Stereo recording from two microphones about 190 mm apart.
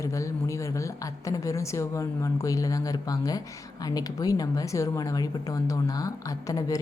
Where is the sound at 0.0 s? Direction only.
15° left (ahead or behind).